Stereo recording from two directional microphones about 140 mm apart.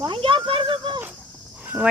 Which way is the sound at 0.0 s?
35° right (ahead or behind).